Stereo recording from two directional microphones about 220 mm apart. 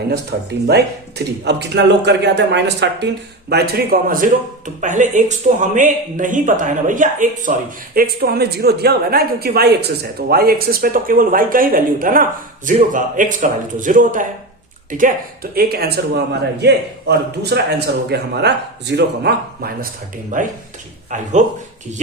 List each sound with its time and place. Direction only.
0.3 s a man's voice: 45° right (ahead or behind)